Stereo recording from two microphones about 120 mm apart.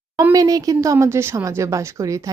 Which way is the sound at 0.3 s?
30° right (ahead or behind).